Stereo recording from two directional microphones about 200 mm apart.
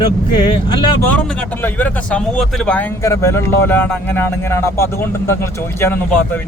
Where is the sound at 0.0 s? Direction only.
20° left (ahead or behind).